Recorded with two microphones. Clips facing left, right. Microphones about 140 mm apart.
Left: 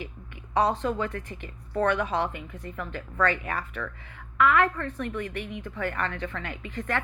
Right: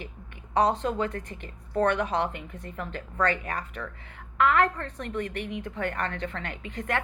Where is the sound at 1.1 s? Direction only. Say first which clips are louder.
Even; 40° right (ahead or behind).